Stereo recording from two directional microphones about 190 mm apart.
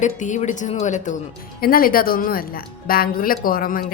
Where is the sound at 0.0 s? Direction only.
40° left (ahead or behind).